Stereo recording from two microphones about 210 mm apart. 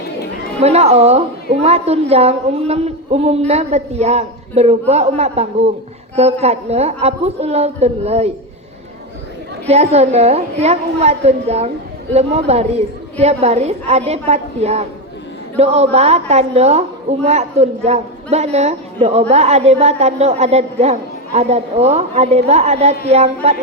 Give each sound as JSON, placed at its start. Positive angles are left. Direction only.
{"t": 0.6, "sound": "a woman's voice", "side_deg": -30}
{"t": 9.6, "sound": "a woman's voice", "side_deg": -30}